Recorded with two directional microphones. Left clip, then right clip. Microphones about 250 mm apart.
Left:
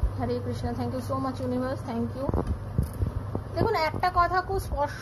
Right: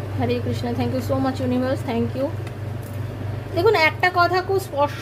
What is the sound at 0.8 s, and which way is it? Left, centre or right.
A woman's voice, right.